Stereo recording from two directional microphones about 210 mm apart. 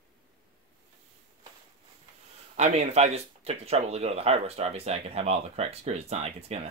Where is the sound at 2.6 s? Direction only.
30° right (ahead or behind).